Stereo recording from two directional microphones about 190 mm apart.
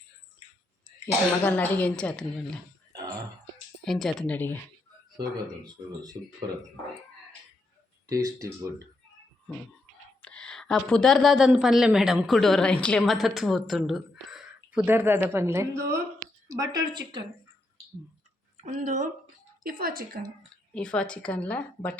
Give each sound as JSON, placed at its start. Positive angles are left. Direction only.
{"t": 1.0, "sound": "speech", "side_deg": 10}
{"t": 3.8, "sound": "a woman's voice", "side_deg": 0}
{"t": 8.0, "sound": "speech", "side_deg": -20}
{"t": 10.2, "sound": "a woman's voice", "side_deg": 5}
{"t": 18.5, "sound": "speech", "side_deg": -40}
{"t": 20.7, "sound": "speech", "side_deg": 5}